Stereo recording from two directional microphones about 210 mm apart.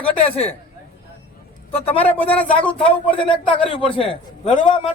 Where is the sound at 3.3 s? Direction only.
25° left (ahead or behind).